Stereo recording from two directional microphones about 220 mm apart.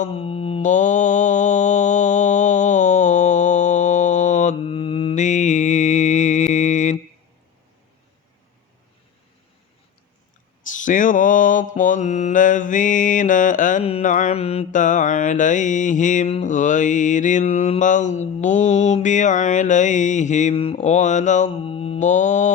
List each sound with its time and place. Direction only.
0.0 s mantra: 25° left (ahead or behind)
10.8 s mantra: 35° left (ahead or behind)